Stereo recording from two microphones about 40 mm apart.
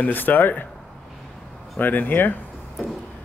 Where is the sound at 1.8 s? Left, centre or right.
Left.